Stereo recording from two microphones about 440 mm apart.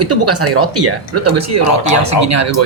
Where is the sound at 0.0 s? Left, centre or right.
Right.